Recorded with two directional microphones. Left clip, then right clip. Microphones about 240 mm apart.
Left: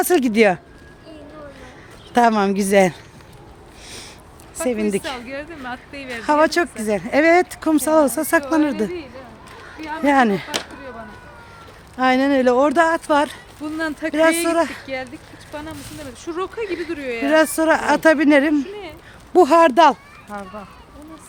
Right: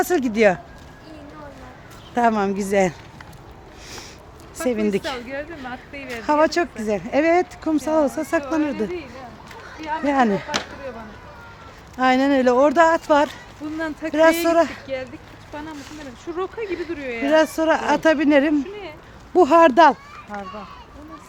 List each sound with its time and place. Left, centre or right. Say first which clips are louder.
0.0 s speech: left 2 dB; left
2.1 s speech: left 3 dB; left
4.6 s speech: left 1 dB; centre
5.2 s speech: even; left
6.2 s speech: left 2 dB; centre
11.9 s speech: left 1 dB; centre
13.7 s speech: left 3 dB; left
14.1 s speech: right 1 dB; centre
14.8 s speech: left 1 dB; left
16.6 s speech: left 2 dB; centre
16.9 s speech: left 2 dB; left
17.2 s speech: left 1 dB; left
18.5 s a sound: left 1 dB; left
19.3 s speech: left 1 dB; left